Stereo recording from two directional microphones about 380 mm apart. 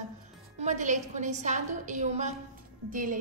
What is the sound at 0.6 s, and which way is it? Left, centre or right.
A woman's voice, centre.